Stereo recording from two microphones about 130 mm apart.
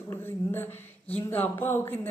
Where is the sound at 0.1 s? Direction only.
15° left (ahead or behind).